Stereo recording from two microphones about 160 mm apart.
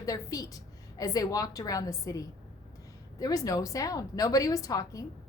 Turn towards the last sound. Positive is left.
turn(degrees=20)  # may be behind; listen again after turning